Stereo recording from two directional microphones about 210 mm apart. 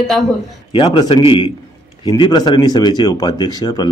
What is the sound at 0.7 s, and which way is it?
Speech, 25° left (ahead or behind).